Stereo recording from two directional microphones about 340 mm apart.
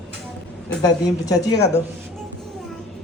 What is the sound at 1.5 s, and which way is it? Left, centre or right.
Speech, left.